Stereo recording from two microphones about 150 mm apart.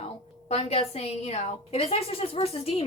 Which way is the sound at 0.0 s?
40° left (ahead or behind).